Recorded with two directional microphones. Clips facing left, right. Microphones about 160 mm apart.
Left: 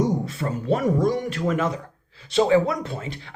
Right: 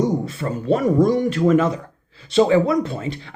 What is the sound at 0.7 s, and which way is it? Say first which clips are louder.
Speech: right 5 dB; 30° right (ahead or behind).